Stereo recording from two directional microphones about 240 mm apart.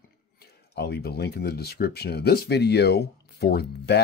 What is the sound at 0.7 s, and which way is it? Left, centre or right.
Speech, left.